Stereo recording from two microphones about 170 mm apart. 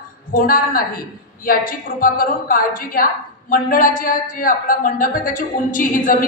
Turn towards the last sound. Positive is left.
turn(degrees=55)  # may be behind; listen again after turning